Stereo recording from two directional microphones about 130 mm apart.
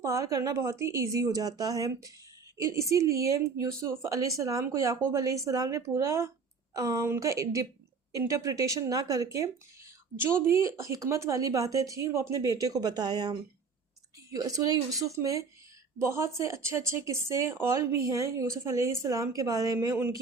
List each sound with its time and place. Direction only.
0.0 s a woman's voice: 25° right (ahead or behind)
14.3 s a woman's voice: 25° right (ahead or behind)